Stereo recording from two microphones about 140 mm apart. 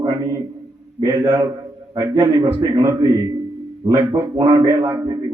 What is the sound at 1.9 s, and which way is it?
Mantra, 30° right (ahead or behind).